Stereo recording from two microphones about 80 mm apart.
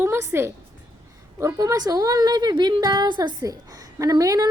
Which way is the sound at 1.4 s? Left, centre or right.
Right.